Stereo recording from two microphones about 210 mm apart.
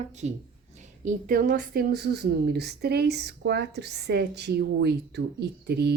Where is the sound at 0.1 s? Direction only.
35° right (ahead or behind).